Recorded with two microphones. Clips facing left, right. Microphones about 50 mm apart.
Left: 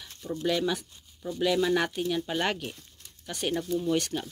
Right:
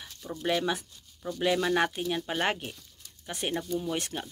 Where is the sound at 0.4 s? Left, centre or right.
Right.